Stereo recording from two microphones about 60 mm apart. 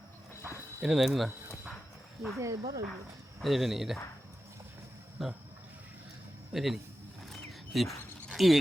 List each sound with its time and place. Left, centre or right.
0.8 s speech: centre
2.4 s speech: right
3.4 s speech: centre
5.2 s speech: centre
6.5 s speech: centre
7.3 s a sound: centre